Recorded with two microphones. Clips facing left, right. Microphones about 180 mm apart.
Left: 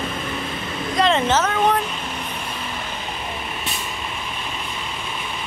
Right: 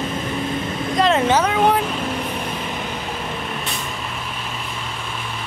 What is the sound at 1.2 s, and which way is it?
Speech, 15° right (ahead or behind).